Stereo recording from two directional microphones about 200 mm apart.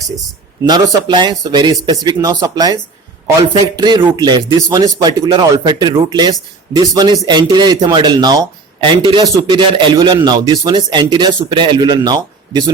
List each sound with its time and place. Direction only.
0.6 s speech: 20° right (ahead or behind)